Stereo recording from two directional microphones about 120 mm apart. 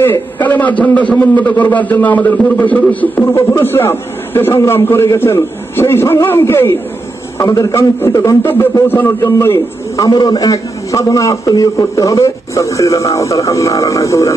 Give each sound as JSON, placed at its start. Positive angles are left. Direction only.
{"t": 0.0, "sound": "a man's voice", "side_deg": 15}